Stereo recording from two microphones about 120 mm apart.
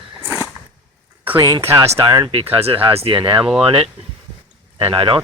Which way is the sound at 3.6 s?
55° right (ahead or behind).